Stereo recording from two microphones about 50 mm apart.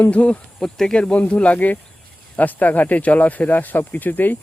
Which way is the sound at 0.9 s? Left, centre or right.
Centre.